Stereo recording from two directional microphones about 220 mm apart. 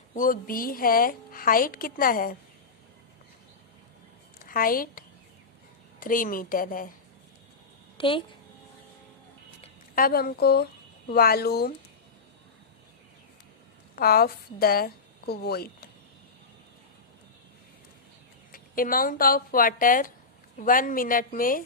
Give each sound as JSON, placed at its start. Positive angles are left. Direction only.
{"t": 0.1, "sound": "a woman's voice", "side_deg": 40}
{"t": 4.4, "sound": "a woman's voice", "side_deg": 40}
{"t": 7.9, "sound": "a woman's voice", "side_deg": 25}
{"t": 9.9, "sound": "speech", "side_deg": 40}
{"t": 13.9, "sound": "a woman's voice", "side_deg": 45}
{"t": 18.5, "sound": "a woman's voice", "side_deg": 40}